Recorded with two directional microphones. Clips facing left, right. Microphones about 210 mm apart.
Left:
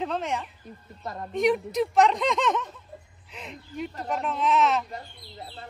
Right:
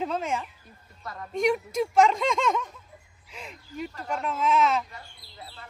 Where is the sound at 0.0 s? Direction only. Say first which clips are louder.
Even; centre (ahead or behind).